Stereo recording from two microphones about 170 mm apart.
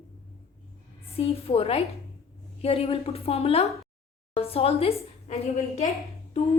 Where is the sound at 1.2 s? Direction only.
35° left (ahead or behind).